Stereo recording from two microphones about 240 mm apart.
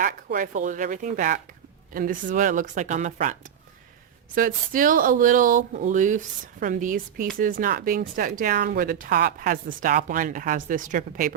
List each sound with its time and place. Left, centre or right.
0.0 s speech: right
4.4 s speech: right